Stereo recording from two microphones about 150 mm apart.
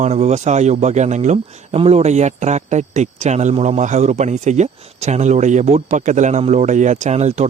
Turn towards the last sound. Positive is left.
turn(degrees=-50)  # may be behind; listen again after turning